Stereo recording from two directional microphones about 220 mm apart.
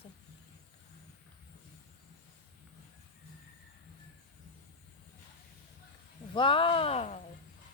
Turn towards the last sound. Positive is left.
turn(degrees=30)  # may be behind; listen again after turning